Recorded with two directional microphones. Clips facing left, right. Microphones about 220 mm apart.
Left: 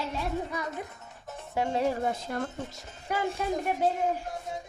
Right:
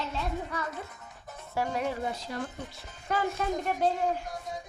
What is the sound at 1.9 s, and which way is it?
Speech, 50° left (ahead or behind).